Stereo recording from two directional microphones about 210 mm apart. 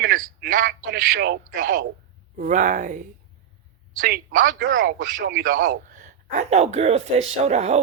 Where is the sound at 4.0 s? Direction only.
40° right (ahead or behind).